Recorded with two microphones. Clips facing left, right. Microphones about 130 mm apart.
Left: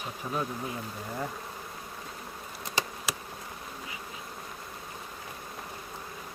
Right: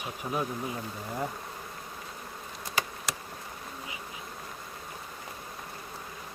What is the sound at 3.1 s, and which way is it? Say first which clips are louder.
Insect: left 1 dB; 5° left (ahead or behind).